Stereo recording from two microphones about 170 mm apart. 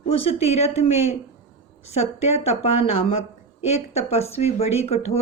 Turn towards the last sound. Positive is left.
turn(degrees=40)  # may be behind; listen again after turning